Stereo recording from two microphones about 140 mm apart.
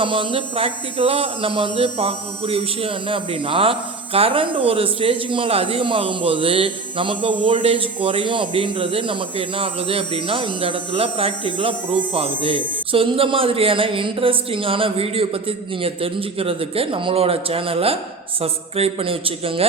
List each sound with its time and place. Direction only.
0.0 s speech: 40° right (ahead or behind)